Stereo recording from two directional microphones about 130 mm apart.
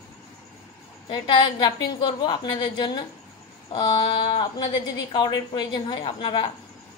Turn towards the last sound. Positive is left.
turn(degrees=40)  # may be behind; listen again after turning